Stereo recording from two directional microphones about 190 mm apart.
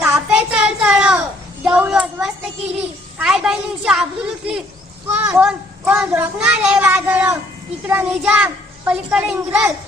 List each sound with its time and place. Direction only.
0.0 s child singing: 5° right (ahead or behind)
1.6 s a sound: 5° right (ahead or behind)
5.0 s a child's voice: 10° right (ahead or behind)